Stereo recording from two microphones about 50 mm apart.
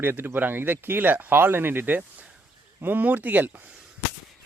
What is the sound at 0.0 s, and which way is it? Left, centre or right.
Speech, right.